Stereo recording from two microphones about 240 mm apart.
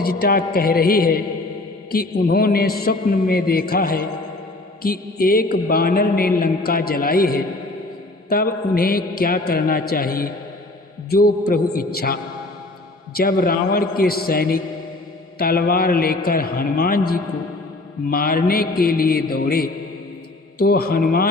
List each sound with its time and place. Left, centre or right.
0.0 s mantra: left